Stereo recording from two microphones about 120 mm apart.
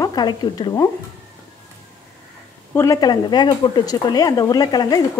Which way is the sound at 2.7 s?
20° left (ahead or behind).